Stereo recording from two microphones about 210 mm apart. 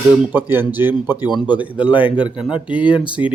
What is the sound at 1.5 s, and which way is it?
Speech, 5° right (ahead or behind).